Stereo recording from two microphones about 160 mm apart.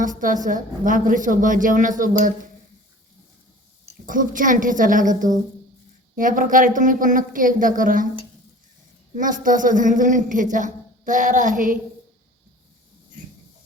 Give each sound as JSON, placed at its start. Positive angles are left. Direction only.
{"t": 0.0, "sound": "a woman's voice", "side_deg": -55}
{"t": 3.8, "sound": "a woman's voice", "side_deg": -55}
{"t": 9.1, "sound": "a woman's voice", "side_deg": -55}